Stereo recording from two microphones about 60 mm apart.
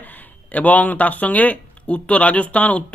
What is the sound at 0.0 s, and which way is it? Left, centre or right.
Speech, left.